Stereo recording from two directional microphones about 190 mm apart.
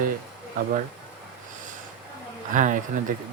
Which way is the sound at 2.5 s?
45° right (ahead or behind).